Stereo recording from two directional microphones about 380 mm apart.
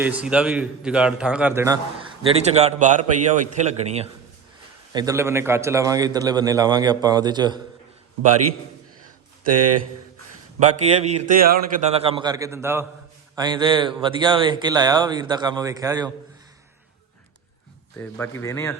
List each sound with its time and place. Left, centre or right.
0.0 s a man's voice: centre
9.5 s speech: right
10.6 s a man's voice: centre
17.9 s a man's voice: centre